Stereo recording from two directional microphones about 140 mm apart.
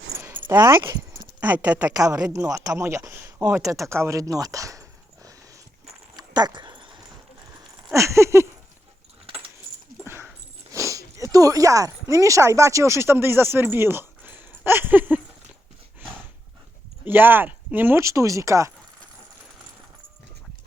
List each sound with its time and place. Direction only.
0.2 s keys jangling: 15° right (ahead or behind)
0.6 s speech: 30° right (ahead or behind)
1.4 s speech: 10° right (ahead or behind)
1.9 s speech: 25° right (ahead or behind)
6.1 s dog: 30° right (ahead or behind)
7.9 s a sound: 20° right (ahead or behind)
10.0 s speech: 15° right (ahead or behind)
17.1 s speech: 15° right (ahead or behind)